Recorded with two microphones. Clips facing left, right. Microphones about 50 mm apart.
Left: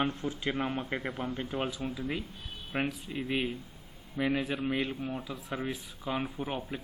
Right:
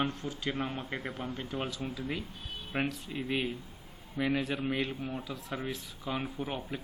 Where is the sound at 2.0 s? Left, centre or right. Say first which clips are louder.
Left 1 dB; centre.